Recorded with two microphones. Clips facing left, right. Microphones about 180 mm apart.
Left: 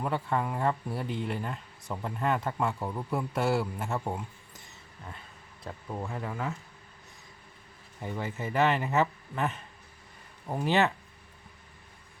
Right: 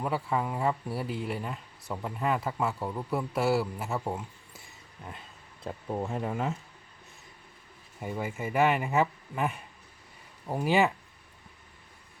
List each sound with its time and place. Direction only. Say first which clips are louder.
0.0 s speech: even; 5° right (ahead or behind)
5.6 s speech: right 4 dB; 25° right (ahead or behind)
8.0 s speech: right 1 dB; 10° right (ahead or behind)